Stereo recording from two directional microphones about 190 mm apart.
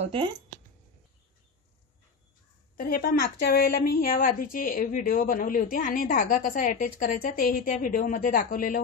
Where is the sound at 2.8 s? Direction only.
50° left (ahead or behind).